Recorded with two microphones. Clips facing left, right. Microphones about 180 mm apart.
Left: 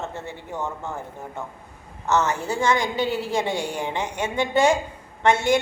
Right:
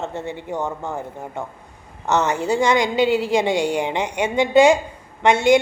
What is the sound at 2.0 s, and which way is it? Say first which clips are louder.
A woman's voice: right 3 dB; 20° right (ahead or behind).